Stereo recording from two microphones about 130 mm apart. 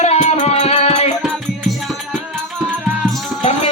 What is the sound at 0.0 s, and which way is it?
Music, 55° left (ahead or behind).